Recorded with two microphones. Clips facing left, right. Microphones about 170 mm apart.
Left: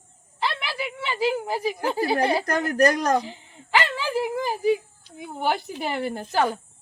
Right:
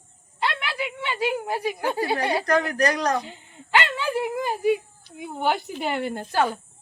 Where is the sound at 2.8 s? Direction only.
45° left (ahead or behind).